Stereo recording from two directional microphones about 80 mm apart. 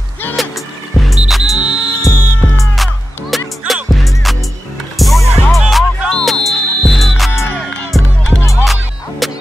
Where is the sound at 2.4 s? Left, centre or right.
Left.